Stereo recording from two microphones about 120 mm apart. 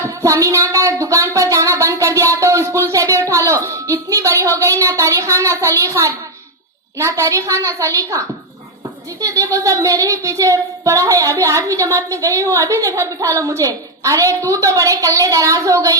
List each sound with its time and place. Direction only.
0.0 s a sound: 25° right (ahead or behind)
4.8 s speech: 25° right (ahead or behind)
9.2 s speech: 30° right (ahead or behind)